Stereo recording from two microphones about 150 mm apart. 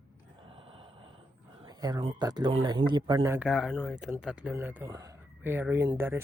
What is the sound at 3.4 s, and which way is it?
Speech, centre (ahead or behind).